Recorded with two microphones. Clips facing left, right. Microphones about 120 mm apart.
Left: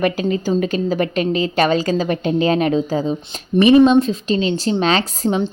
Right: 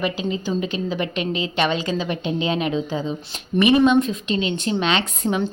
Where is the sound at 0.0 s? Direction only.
50° left (ahead or behind).